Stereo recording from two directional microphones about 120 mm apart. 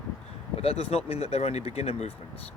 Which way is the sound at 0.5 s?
55° left (ahead or behind).